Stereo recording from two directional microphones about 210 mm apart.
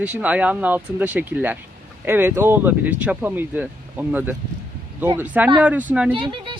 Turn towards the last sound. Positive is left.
turn(degrees=-25)  # may be behind; listen again after turning